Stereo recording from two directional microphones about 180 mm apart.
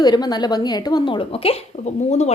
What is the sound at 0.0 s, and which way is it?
A woman's voice, 25° left (ahead or behind).